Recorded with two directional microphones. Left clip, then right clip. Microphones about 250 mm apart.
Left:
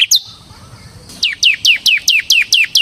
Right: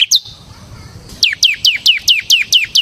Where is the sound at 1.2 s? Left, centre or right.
Right.